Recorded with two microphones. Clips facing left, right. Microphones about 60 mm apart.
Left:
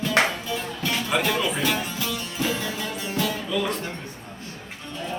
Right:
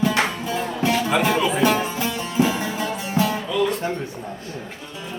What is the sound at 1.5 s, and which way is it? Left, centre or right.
Music, right.